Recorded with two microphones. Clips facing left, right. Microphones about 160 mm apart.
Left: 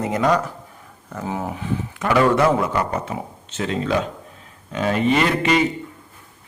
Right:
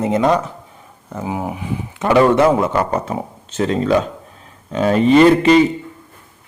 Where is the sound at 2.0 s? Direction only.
25° right (ahead or behind).